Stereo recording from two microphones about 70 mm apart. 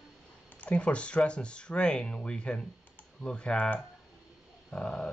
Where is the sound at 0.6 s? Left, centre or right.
Centre.